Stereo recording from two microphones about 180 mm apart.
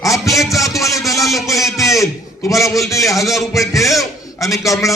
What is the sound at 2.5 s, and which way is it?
A man's voice, 15° left (ahead or behind).